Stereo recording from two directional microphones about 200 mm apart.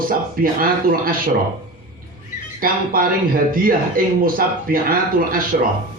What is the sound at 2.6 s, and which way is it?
Speech, 45° right (ahead or behind).